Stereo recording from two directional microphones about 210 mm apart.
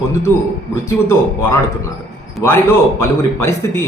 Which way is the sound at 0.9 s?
10° left (ahead or behind).